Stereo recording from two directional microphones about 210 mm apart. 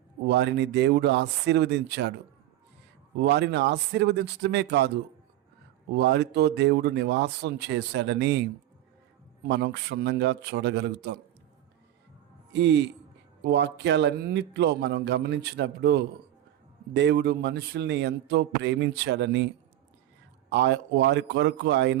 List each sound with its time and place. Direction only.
0.3 s a man's voice: 55° right (ahead or behind)
3.2 s a man's voice: 55° right (ahead or behind)
5.9 s a man's voice: 50° right (ahead or behind)
12.5 s a man's voice: 55° right (ahead or behind)
20.5 s speech: 55° right (ahead or behind)